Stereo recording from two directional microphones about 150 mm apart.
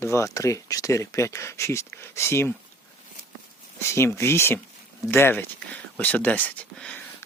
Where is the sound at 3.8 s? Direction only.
15° left (ahead or behind).